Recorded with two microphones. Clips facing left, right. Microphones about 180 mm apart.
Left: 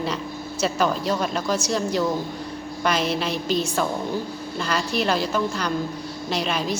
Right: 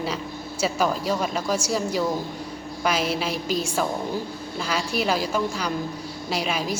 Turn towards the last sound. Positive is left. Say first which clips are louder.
# left 1 dB
turn(degrees=-10)  # may be behind; listen again after turning